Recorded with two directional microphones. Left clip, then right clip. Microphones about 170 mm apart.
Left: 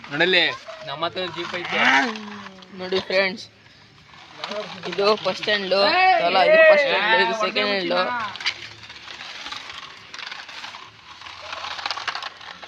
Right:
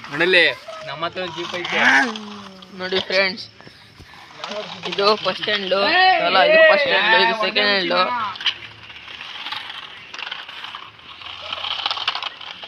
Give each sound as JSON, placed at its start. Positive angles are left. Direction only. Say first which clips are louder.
{"t": 0.1, "sound": "speech", "louder": "right 3 dB", "side_deg": 70}
{"t": 0.9, "sound": "speech", "louder": "even", "side_deg": 20}
{"t": 4.4, "sound": "speech", "louder": "right 1 dB", "side_deg": 0}
{"t": 5.8, "sound": "a man's voice", "louder": "right 2 dB", "side_deg": -10}
{"t": 6.2, "sound": "speech", "louder": "right 2 dB", "side_deg": 10}
{"t": 6.5, "sound": "a man's voice", "louder": "left 1 dB", "side_deg": 30}
{"t": 7.2, "sound": "speech", "louder": "right 3 dB", "side_deg": 5}
{"t": 11.5, "sound": "a sound", "louder": "right 5 dB", "side_deg": 10}